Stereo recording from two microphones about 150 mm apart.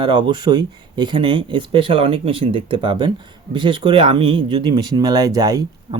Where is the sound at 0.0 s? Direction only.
30° right (ahead or behind).